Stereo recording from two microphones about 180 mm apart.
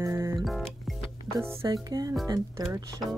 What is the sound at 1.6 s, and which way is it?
Speech, 20° right (ahead or behind).